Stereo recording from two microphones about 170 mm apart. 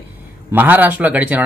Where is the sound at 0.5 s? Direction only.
10° right (ahead or behind).